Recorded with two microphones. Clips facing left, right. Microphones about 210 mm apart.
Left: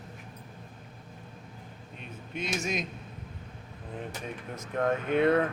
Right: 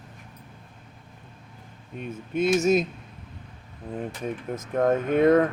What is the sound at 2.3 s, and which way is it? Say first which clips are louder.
Speech: right 12 dB; 40° right (ahead or behind).